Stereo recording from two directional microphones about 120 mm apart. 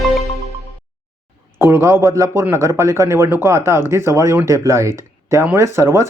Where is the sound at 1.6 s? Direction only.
20° right (ahead or behind).